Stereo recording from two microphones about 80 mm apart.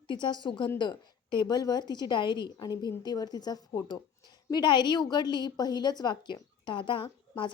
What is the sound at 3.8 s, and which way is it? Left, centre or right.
A woman's voice, left.